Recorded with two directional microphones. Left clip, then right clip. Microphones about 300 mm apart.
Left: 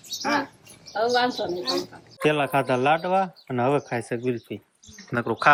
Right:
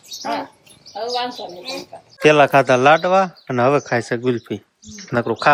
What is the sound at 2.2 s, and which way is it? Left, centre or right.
Speech, centre.